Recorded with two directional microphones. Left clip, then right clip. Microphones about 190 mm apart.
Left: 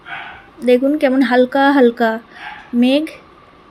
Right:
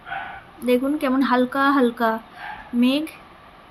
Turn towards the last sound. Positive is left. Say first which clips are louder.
# left 6 dB
turn(degrees=15)  # may be behind; listen again after turning